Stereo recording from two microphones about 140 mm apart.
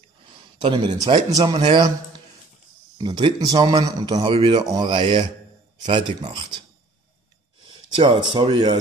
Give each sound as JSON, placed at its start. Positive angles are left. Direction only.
{"t": 0.6, "sound": "a man's voice", "side_deg": -35}
{"t": 3.0, "sound": "a man's voice", "side_deg": -35}
{"t": 7.9, "sound": "a man's voice", "side_deg": -40}